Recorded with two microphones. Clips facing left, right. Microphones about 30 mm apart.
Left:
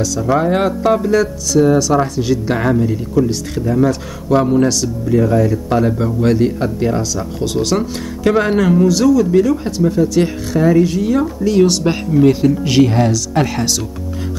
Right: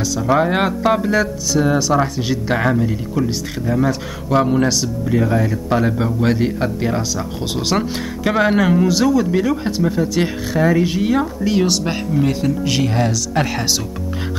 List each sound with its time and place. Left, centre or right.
0.0 s speech: centre
8.2 s speech: centre
11.8 s speech: centre